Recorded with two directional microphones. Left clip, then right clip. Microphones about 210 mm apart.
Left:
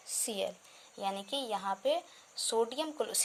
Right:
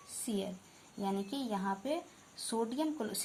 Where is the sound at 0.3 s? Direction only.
50° left (ahead or behind).